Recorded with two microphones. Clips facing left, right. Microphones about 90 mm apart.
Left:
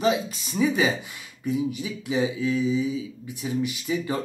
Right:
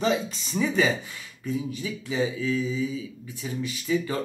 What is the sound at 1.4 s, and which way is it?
Speech, 15° left (ahead or behind).